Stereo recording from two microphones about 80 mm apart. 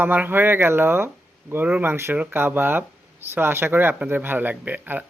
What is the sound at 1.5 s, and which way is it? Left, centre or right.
Speech, centre.